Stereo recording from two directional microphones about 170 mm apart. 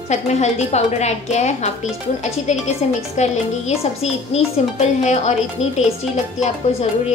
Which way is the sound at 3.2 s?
40° left (ahead or behind).